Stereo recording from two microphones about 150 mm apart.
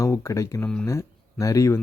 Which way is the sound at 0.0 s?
20° left (ahead or behind).